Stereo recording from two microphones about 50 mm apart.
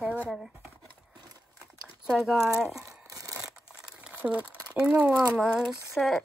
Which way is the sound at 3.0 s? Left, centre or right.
Right.